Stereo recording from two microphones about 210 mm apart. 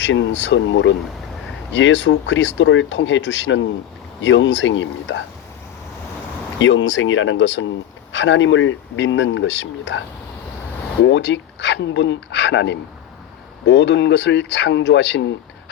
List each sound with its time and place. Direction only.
0.0 s speech: 60° left (ahead or behind)
6.6 s speech: 65° left (ahead or behind)
11.0 s speech: 55° left (ahead or behind)